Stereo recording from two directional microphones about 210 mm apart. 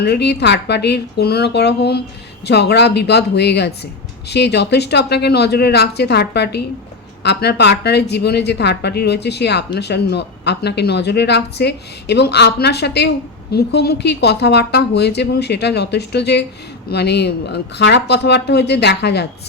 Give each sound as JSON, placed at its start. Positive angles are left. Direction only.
{"t": 0.0, "sound": "speech", "side_deg": 50}